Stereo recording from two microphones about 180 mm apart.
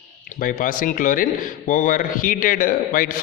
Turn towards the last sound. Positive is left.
turn(degrees=50)  # may be behind; listen again after turning